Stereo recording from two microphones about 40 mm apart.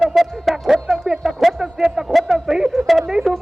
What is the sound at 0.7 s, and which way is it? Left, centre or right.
Music, centre.